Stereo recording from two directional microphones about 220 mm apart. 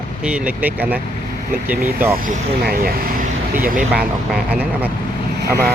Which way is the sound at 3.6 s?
5° right (ahead or behind).